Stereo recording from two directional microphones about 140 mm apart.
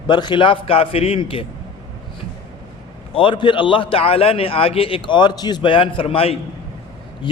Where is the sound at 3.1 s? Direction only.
40° left (ahead or behind).